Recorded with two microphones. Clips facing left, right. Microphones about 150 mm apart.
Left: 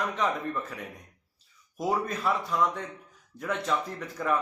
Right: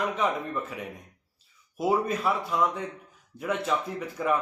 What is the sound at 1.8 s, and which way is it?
A man's voice, 5° right (ahead or behind).